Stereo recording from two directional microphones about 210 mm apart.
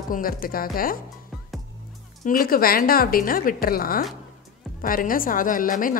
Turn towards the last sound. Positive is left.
turn(degrees=40)  # may be behind; listen again after turning